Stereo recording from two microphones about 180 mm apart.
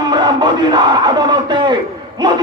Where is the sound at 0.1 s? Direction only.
25° right (ahead or behind).